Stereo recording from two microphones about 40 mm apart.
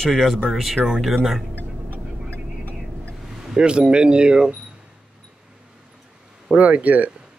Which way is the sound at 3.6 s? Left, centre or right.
Right.